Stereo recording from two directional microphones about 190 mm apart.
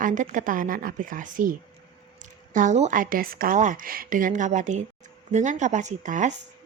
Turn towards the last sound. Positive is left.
turn(degrees=-40)  # may be behind; listen again after turning